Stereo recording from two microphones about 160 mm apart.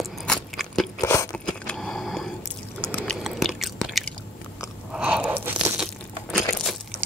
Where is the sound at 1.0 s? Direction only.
15° left (ahead or behind).